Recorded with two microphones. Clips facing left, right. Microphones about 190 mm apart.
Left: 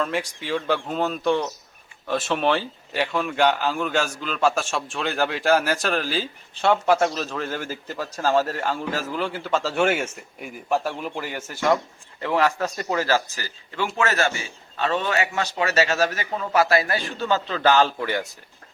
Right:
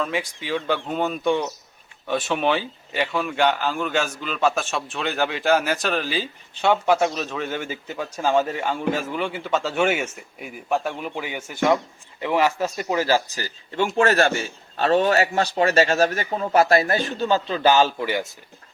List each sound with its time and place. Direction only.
0.0 s a man's voice: centre (ahead or behind)
13.4 s speech: 30° right (ahead or behind)
14.1 s a man's voice: 55° right (ahead or behind)
14.8 s a man's voice: 40° right (ahead or behind); by 17.7 s 20° right (ahead or behind)
17.7 s a man's voice: 5° right (ahead or behind)